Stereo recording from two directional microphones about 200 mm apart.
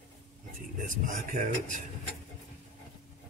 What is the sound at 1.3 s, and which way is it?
Speech, 40° right (ahead or behind).